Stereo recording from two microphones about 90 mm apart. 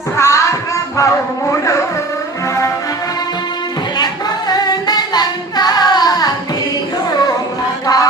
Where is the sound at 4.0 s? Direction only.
50° left (ahead or behind).